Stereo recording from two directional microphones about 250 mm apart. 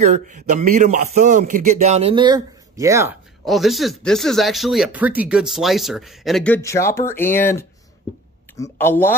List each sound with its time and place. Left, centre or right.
0.0 s a man's voice: right; by 3.2 s centre
3.4 s speech: centre